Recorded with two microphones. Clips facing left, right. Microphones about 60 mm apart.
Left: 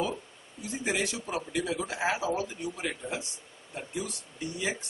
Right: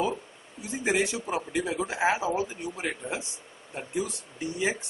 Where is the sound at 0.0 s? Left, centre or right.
Right.